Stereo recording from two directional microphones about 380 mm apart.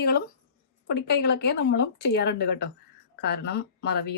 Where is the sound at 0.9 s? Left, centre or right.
Left.